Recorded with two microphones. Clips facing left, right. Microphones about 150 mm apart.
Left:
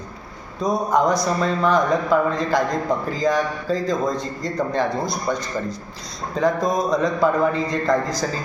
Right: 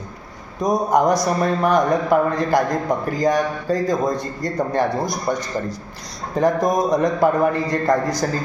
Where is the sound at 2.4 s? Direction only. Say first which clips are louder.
Right 2 dB; 10° right (ahead or behind).